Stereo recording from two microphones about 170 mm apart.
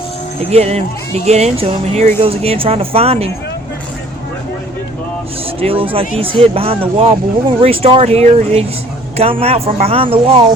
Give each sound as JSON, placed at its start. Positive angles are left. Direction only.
{"t": 0.5, "sound": "speech", "side_deg": -40}
{"t": 5.5, "sound": "speech", "side_deg": -35}